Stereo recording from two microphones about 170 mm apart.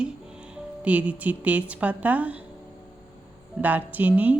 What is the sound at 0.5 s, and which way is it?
Speech, 10° right (ahead or behind).